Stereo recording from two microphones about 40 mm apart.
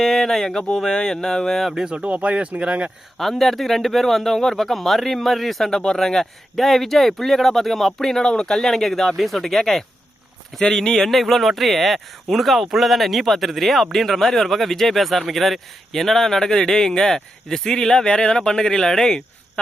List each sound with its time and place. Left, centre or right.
0.0 s speech: centre
0.9 s speech: centre
1.7 s speech: right
3.2 s speech: centre